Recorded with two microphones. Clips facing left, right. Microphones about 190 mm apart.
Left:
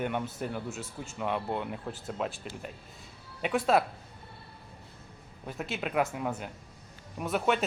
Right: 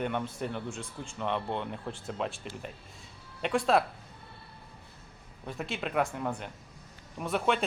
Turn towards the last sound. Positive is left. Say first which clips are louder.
# left 1 dB
turn(degrees=0)  # may be behind; listen again after turning